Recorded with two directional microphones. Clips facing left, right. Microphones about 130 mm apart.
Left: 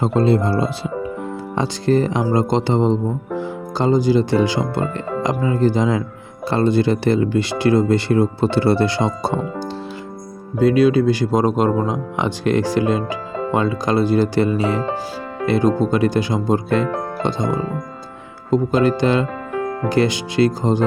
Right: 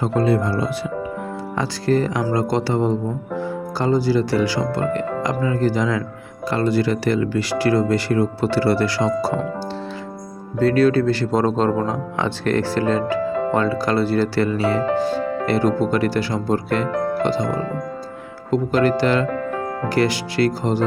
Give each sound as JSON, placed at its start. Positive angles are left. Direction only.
{"t": 0.0, "sound": "speech", "side_deg": 25}
{"t": 10.6, "sound": "speech", "side_deg": 15}